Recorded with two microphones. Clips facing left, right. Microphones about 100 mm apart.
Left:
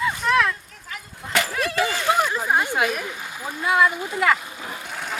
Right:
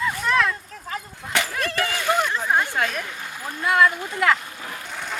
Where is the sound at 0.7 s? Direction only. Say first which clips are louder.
Right 6 dB; 35° right (ahead or behind).